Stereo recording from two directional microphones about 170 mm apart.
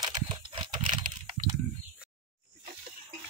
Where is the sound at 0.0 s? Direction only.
25° right (ahead or behind).